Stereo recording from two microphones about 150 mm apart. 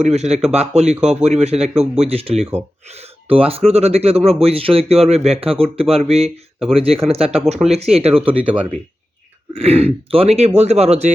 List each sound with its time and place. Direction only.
0.0 s speech: 45° right (ahead or behind)
9.5 s speech: 40° right (ahead or behind)